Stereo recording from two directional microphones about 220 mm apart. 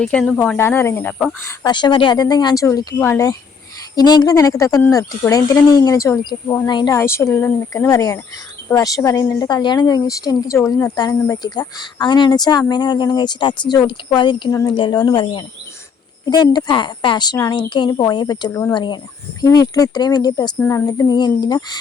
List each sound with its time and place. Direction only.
0.0 s a woman's voice: 5° left (ahead or behind)